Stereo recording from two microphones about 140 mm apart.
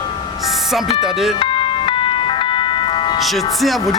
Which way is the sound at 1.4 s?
35° left (ahead or behind).